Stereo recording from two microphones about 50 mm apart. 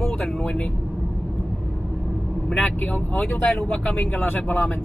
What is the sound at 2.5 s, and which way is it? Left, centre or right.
Speech, left.